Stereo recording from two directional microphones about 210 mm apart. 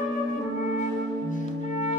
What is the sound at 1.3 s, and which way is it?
Music, 35° left (ahead or behind).